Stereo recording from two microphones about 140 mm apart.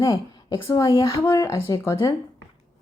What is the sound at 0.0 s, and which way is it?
A woman's voice, 25° left (ahead or behind).